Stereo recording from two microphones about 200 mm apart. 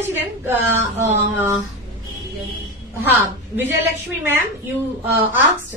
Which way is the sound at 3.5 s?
10° right (ahead or behind).